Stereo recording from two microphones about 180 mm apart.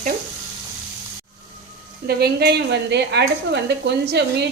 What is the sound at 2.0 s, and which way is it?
A woman's voice, 60° right (ahead or behind).